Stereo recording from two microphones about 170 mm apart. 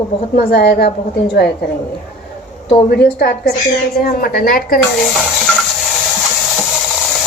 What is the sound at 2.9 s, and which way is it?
A woman's voice, 70° left (ahead or behind).